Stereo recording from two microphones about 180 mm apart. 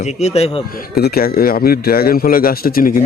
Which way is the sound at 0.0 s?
40° left (ahead or behind).